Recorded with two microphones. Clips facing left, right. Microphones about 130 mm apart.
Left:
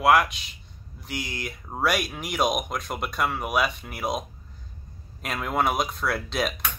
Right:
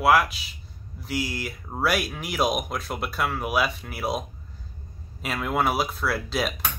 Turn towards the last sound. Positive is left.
turn(degrees=0)  # may be behind; listen again after turning